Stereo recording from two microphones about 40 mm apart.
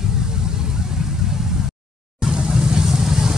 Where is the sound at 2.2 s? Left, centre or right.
Right.